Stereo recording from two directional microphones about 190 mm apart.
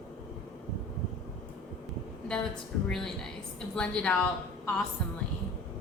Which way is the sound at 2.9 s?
Centre (ahead or behind).